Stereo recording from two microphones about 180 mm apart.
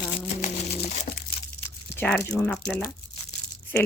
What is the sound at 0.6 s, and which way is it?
Crumpling, 35° left (ahead or behind).